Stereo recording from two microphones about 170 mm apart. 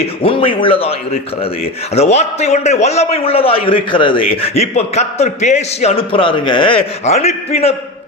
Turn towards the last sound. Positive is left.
turn(degrees=35)  # may be behind; listen again after turning